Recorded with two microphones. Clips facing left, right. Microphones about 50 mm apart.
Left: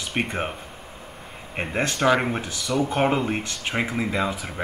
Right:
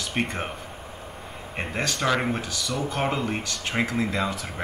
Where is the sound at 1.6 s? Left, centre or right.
Left.